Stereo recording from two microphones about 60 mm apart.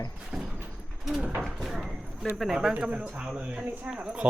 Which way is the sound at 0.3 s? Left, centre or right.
Centre.